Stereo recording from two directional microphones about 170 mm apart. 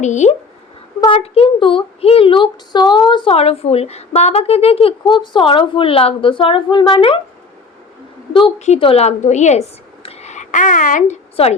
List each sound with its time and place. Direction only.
0.0 s speech: 45° left (ahead or behind); by 7.2 s 30° left (ahead or behind)
8.3 s a woman's voice: 30° left (ahead or behind); by 11.2 s 50° left (ahead or behind)
11.4 s speech: 35° left (ahead or behind)